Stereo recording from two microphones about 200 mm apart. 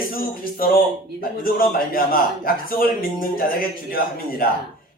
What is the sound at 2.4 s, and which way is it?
A man's voice, 45° left (ahead or behind).